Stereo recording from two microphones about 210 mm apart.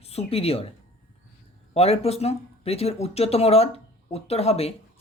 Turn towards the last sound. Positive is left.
turn(degrees=30)  # may be behind; listen again after turning